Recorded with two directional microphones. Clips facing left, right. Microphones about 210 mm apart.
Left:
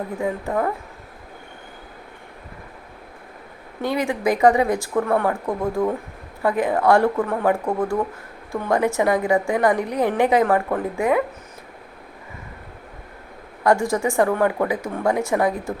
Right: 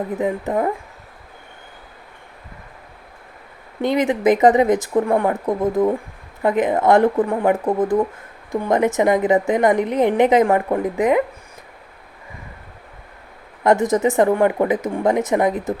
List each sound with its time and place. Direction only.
0.2 s speech: 20° right (ahead or behind)
3.8 s speech: 20° right (ahead or behind)
13.7 s speech: 20° right (ahead or behind)